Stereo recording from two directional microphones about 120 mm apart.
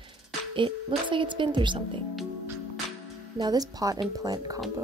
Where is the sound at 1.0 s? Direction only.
45° right (ahead or behind).